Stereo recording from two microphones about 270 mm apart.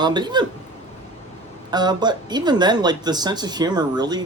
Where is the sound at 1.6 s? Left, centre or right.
Centre.